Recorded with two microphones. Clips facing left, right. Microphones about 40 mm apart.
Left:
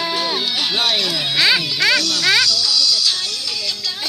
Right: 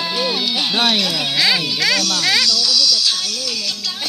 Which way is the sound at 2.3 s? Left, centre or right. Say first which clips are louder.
Left 2 dB; centre.